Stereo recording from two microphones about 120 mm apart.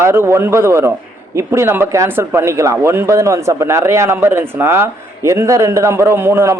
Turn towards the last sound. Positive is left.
turn(degrees=-20)  # may be behind; listen again after turning